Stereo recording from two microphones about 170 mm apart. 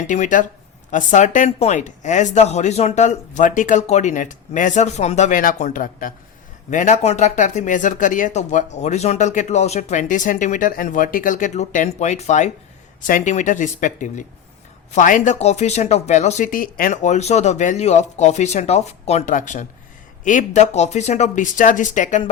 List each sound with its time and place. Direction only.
0.1 s speech: 50° left (ahead or behind)